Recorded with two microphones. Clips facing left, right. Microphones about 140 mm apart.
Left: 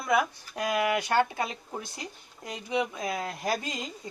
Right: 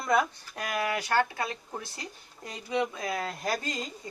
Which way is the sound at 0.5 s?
20° left (ahead or behind).